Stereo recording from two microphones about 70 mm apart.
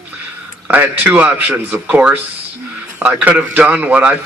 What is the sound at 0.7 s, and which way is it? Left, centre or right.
A man's voice, right.